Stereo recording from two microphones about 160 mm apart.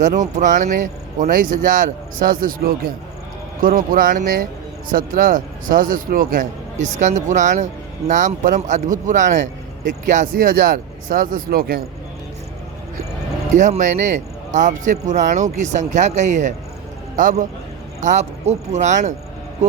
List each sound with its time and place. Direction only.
0.0 s a man's voice: 50° right (ahead or behind)
13.6 s a man's voice: 50° right (ahead or behind)